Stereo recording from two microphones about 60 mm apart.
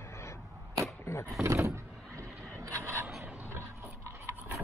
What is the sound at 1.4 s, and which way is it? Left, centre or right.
Speech, right.